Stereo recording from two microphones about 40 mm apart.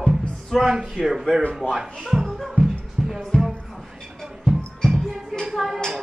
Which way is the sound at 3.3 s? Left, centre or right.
Left.